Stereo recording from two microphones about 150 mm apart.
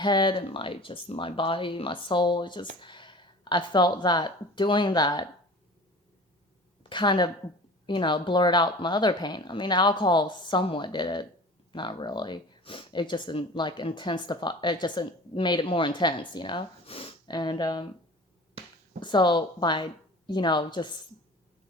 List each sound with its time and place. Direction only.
0.0 s speech: 30° left (ahead or behind)
6.8 s a woman's voice: 30° left (ahead or behind)
18.9 s speech: 30° left (ahead or behind)